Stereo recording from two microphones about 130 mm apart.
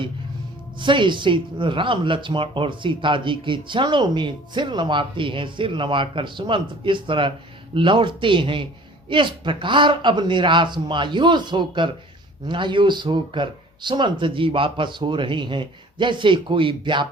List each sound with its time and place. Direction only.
0.8 s speech: 40° right (ahead or behind)